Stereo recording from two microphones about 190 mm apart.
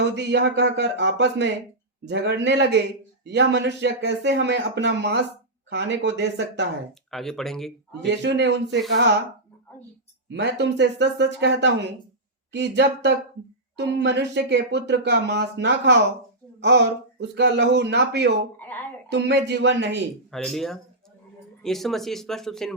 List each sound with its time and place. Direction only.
0.0 s speech: 65° right (ahead or behind)
7.1 s speech: centre (ahead or behind)
8.0 s speech: 65° right (ahead or behind)
10.2 s speech: 65° right (ahead or behind)
20.3 s speech: centre (ahead or behind)